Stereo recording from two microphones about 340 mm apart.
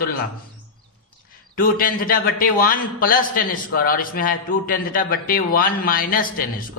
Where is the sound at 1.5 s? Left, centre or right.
Left.